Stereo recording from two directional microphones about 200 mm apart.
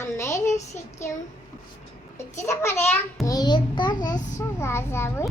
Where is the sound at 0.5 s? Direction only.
15° left (ahead or behind).